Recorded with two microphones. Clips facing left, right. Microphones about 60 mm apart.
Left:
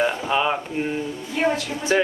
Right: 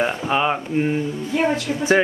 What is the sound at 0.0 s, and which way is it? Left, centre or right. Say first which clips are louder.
Speech: right 1 dB; centre.